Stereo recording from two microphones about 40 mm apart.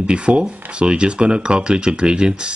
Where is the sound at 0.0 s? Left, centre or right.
Right.